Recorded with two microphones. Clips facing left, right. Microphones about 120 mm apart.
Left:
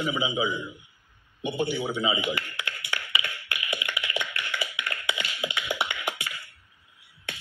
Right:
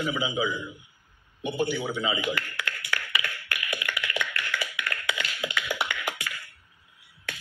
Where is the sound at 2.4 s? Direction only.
55° right (ahead or behind).